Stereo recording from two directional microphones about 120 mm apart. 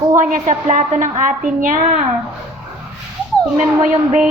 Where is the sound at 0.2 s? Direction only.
90° right.